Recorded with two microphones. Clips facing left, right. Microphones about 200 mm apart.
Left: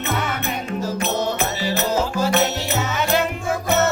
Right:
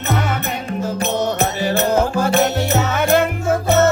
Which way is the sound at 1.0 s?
50° right (ahead or behind).